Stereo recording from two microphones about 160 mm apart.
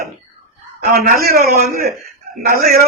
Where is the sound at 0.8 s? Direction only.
70° right (ahead or behind).